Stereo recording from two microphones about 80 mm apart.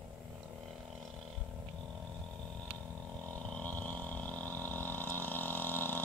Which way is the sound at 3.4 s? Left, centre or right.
Centre.